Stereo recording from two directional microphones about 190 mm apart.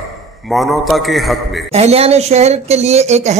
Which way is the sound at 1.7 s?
30° right (ahead or behind).